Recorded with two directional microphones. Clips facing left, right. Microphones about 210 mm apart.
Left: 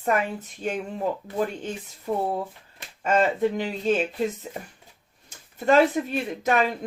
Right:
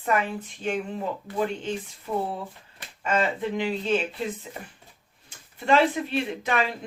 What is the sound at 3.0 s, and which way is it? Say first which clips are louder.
Speech: left 4 dB; 45° left (ahead or behind).